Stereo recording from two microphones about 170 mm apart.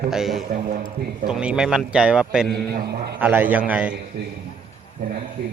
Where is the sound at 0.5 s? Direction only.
50° right (ahead or behind).